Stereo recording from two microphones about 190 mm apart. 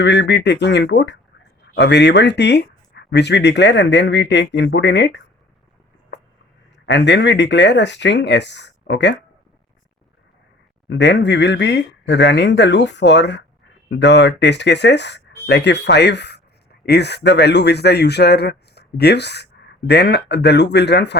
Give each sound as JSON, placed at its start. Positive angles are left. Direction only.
{"t": 0.0, "sound": "speech", "side_deg": 65}
{"t": 6.8, "sound": "speech", "side_deg": 65}
{"t": 10.8, "sound": "speech", "side_deg": 65}